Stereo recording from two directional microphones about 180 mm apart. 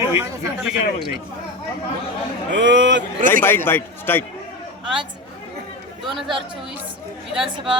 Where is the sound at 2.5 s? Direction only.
80° right.